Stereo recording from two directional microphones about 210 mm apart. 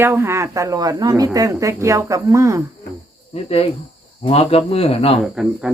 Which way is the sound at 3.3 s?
30° left (ahead or behind).